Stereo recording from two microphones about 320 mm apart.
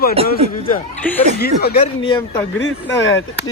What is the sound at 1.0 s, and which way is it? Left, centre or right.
Speech, centre.